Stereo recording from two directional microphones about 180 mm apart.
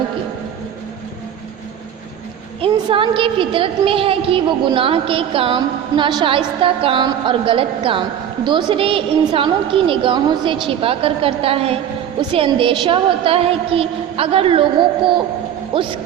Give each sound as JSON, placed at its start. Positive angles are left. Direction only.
{"t": 2.6, "sound": "a woman's voice", "side_deg": -30}